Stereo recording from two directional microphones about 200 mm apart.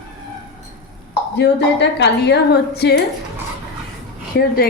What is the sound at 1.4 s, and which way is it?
A woman's voice, 60° left (ahead or behind).